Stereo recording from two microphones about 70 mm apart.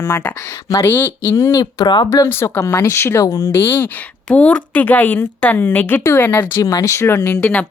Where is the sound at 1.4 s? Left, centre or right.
Left.